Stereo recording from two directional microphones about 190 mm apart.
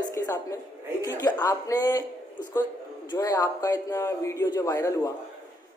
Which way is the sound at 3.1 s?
15° left (ahead or behind).